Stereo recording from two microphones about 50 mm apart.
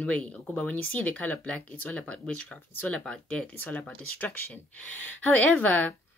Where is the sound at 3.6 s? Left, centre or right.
Left.